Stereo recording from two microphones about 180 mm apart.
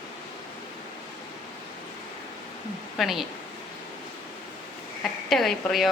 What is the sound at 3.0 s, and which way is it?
Speech, centre (ahead or behind).